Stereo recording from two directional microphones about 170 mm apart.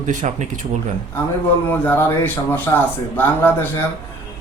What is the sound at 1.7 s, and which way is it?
A man's voice, 10° left (ahead or behind).